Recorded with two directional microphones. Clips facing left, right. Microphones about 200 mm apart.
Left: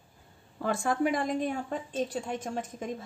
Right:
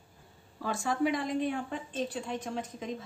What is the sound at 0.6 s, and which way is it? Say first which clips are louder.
A woman's voice: left 2 dB; 55° left (ahead or behind).